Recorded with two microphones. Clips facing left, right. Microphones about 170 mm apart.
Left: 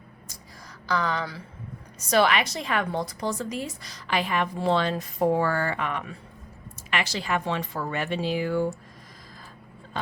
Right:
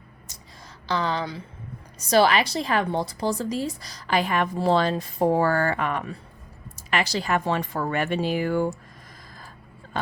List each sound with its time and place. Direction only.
0.9 s a woman's voice: 30° right (ahead or behind); by 8.7 s 50° right (ahead or behind)